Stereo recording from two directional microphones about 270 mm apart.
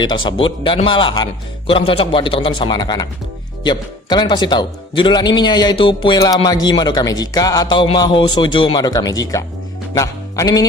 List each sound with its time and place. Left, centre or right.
0.3 s a man's voice: centre
9.9 s music: centre